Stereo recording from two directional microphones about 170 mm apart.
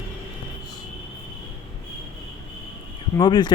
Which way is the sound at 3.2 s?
25° left (ahead or behind).